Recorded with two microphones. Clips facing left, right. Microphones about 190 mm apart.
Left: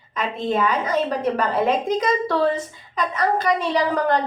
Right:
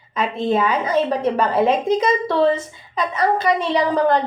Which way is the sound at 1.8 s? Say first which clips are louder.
Right 3 dB; 25° right (ahead or behind).